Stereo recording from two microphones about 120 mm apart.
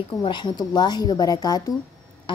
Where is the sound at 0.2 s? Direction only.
40° left (ahead or behind).